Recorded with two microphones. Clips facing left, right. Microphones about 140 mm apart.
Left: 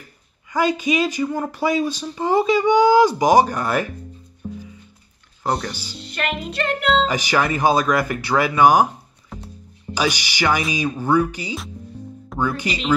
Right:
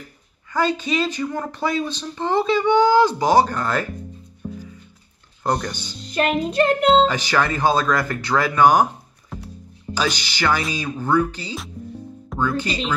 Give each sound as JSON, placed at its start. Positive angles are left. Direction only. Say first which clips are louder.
{"t": 0.5, "sound": "speech", "louder": "left 2 dB", "side_deg": 15}
{"t": 5.4, "sound": "speech", "louder": "right 1 dB", "side_deg": 5}
{"t": 6.0, "sound": "music", "louder": "right 6 dB", "side_deg": -40}
{"t": 7.1, "sound": "speech", "louder": "left 1 dB", "side_deg": 10}
{"t": 9.3, "sound": "music", "louder": "right 1 dB", "side_deg": 0}
{"t": 9.9, "sound": "speech", "louder": "left 2 dB", "side_deg": 10}